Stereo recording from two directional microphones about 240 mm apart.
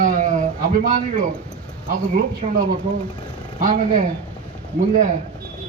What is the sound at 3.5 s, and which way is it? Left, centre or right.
Speech, right.